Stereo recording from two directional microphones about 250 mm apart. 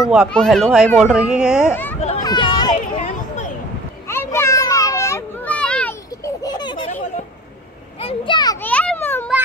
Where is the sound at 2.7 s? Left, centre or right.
Left.